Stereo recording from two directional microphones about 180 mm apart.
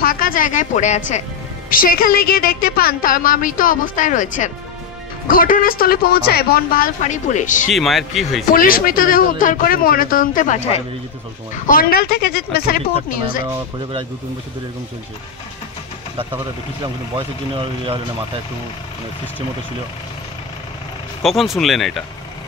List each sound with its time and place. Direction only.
0.0 s a woman's voice: 50° left (ahead or behind)
1.7 s a woman's voice: 50° left (ahead or behind)
7.7 s speech: centre (ahead or behind)
8.5 s a woman's voice: 50° left (ahead or behind)
11.6 s speech: 55° left (ahead or behind)
21.2 s speech: centre (ahead or behind)